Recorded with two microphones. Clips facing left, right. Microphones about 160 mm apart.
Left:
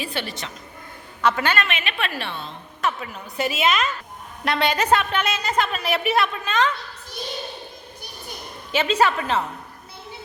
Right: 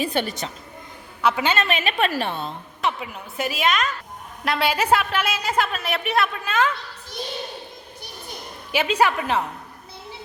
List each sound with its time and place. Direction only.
0.0 s a woman's voice: 45° right (ahead or behind)
1.2 s a woman's voice: 10° right (ahead or behind)
1.6 s a woman's voice: 40° right (ahead or behind)
2.8 s a woman's voice: 15° right (ahead or behind)
3.3 s a woman's voice: centre (ahead or behind)
8.7 s a woman's voice: 10° right (ahead or behind)